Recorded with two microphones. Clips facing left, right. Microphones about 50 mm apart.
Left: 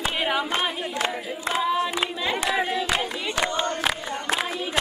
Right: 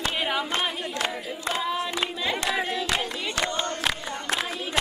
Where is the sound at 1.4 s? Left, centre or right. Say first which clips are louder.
Left 4 dB; centre.